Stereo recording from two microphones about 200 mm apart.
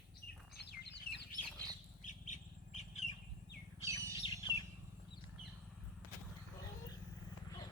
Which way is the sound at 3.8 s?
15° right (ahead or behind).